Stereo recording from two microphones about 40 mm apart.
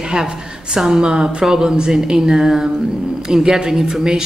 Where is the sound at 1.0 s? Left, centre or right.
Centre.